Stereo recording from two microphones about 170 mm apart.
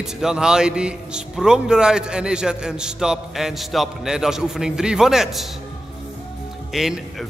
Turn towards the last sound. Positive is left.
turn(degrees=0)  # may be behind; listen again after turning